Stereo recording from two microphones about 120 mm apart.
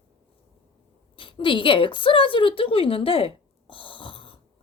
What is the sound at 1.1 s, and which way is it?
A woman's voice, 45° left (ahead or behind).